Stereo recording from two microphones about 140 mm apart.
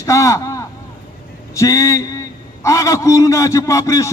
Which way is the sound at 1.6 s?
20° left (ahead or behind).